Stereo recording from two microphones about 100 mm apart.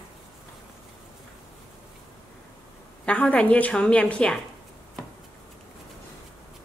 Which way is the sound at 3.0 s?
15° left (ahead or behind).